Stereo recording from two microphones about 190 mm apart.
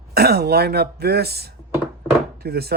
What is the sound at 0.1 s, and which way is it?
Speech, 55° right (ahead or behind).